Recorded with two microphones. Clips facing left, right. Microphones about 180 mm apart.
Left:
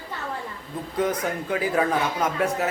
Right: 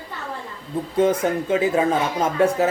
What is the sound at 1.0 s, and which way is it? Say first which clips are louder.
Speech: right 6 dB; 25° right (ahead or behind).